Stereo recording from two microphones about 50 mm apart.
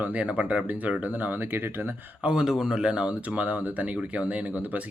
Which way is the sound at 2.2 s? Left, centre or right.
Centre.